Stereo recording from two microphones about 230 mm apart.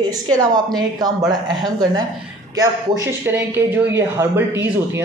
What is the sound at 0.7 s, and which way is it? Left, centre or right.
A man's voice, centre.